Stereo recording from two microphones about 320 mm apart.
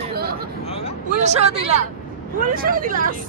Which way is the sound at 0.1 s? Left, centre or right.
Right.